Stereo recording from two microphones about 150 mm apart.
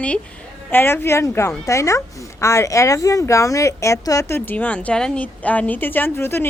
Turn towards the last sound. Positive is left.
turn(degrees=15)  # may be behind; listen again after turning